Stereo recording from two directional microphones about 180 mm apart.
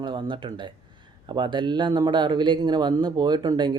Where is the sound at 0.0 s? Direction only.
25° right (ahead or behind).